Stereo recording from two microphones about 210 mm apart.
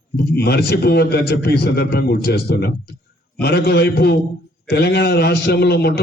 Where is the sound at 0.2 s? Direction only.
50° left (ahead or behind).